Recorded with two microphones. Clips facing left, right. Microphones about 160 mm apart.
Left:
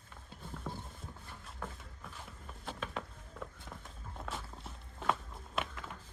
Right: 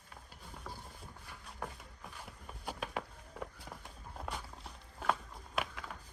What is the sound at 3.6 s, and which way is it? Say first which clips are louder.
Walk: even; centre (ahead or behind).